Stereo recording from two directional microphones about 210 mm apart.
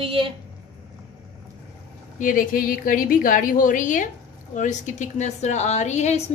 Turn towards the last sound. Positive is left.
turn(degrees=35)  # may be behind; listen again after turning